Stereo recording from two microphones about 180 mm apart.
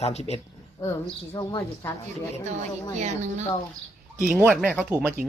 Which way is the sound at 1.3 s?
20° left (ahead or behind).